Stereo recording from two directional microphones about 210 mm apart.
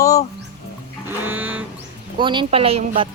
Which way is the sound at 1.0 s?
10° right (ahead or behind).